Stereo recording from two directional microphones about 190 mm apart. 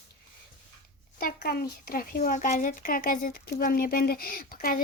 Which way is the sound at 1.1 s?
55° left (ahead or behind).